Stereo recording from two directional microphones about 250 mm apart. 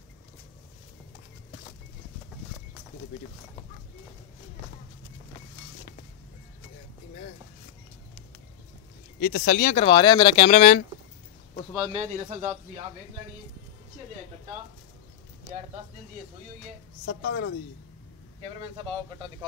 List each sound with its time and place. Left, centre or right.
9.2 s speech: left
9.8 s speech: centre
11.7 s speech: centre
12.0 s speech: right
17.0 s a woman's voice: left